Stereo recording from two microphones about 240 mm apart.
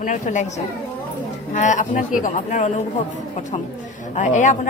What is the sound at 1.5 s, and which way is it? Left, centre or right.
Speech, left.